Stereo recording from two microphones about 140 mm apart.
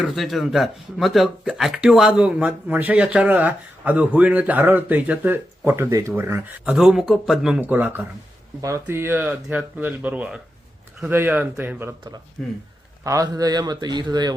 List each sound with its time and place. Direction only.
0.0 s speech: centre (ahead or behind); by 6.5 s 15° right (ahead or behind)
6.7 s speech: 5° right (ahead or behind)
13.1 s a man's voice: 25° right (ahead or behind)